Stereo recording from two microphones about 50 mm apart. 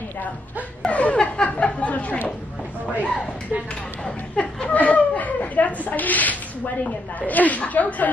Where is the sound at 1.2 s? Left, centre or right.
Left.